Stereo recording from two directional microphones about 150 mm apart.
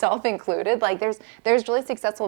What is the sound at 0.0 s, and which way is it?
A woman's voice, 20° right (ahead or behind).